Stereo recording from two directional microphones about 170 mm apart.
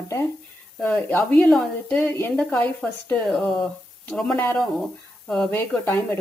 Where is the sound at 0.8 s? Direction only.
15° left (ahead or behind).